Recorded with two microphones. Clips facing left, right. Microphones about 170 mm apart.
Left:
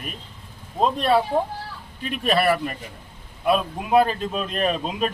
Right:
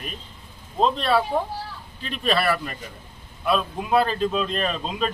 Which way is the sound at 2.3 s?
20° left (ahead or behind).